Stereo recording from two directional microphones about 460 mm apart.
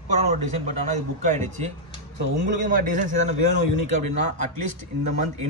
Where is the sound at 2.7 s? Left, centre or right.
Centre.